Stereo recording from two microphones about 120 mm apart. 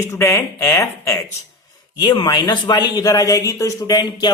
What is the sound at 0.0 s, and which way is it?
Speech, 25° left (ahead or behind).